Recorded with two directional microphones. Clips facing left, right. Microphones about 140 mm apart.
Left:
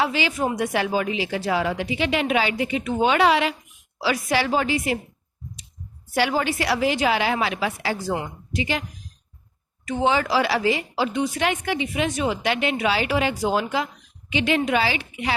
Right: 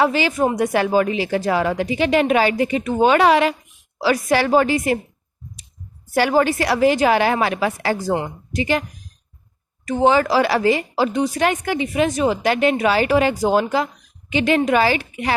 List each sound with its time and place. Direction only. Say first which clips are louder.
0.0 s speech: right 5 dB; 45° right (ahead or behind)
6.1 s speech: right 6 dB; 45° right (ahead or behind)
9.8 s a woman's voice: right 6 dB; 45° right (ahead or behind)